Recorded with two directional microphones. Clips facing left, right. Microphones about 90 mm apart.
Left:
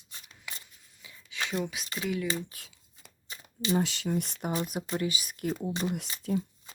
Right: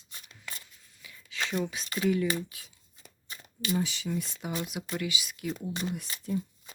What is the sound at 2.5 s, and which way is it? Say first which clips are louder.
Speech: left 1 dB; 45° left (ahead or behind).